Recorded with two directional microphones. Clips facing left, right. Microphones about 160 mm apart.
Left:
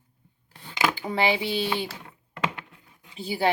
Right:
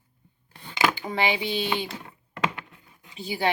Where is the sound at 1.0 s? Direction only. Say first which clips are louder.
Left 2 dB; 35° left (ahead or behind).